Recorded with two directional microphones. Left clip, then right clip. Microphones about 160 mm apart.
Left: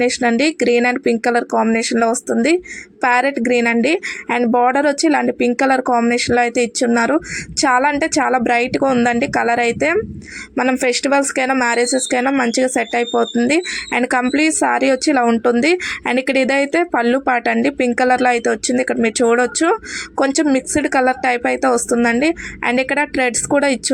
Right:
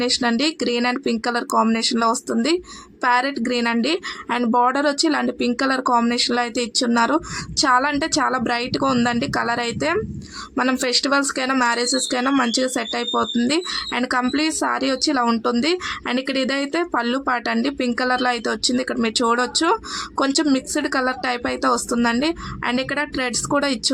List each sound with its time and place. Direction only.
0.0 s speech: 15° left (ahead or behind)
13.1 s speech: 5° left (ahead or behind)
13.5 s speech: 15° left (ahead or behind)